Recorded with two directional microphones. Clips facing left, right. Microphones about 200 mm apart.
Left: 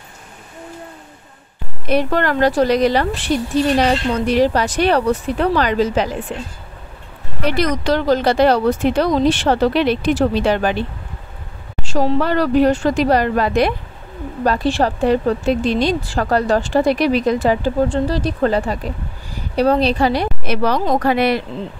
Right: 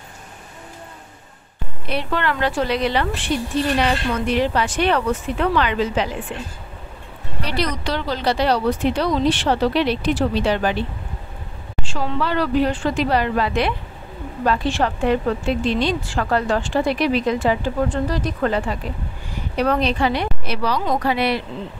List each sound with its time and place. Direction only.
1.9 s speech: 45° left (ahead or behind)
7.4 s speech: 45° left (ahead or behind)
11.8 s speech: 40° left (ahead or behind)